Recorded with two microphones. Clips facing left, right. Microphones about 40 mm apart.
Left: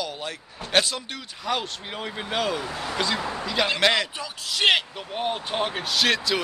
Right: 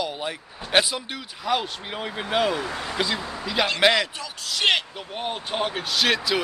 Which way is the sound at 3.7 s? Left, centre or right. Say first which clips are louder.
Right 3 dB; centre.